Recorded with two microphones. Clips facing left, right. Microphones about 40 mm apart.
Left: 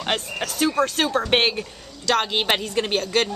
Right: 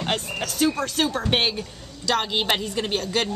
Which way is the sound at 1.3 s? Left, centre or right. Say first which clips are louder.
Left 3 dB; centre.